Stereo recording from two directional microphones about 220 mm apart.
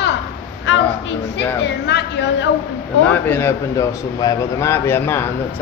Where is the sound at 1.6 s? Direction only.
50° left (ahead or behind).